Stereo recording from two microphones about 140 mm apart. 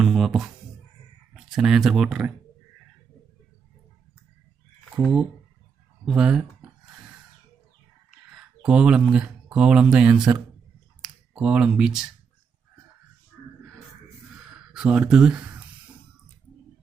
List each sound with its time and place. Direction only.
0.0 s music: 5° right (ahead or behind)
1.3 s speech: 5° right (ahead or behind)
4.9 s speech: 5° right (ahead or behind)
8.4 s speech: 5° right (ahead or behind)
14.7 s speech: 5° right (ahead or behind)